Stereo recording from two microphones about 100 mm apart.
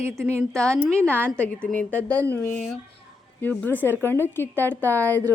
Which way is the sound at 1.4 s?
15° left (ahead or behind).